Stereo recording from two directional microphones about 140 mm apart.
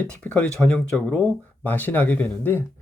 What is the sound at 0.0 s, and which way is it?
Speech, 10° left (ahead or behind).